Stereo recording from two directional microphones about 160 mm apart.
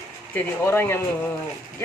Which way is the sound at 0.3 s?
15° left (ahead or behind).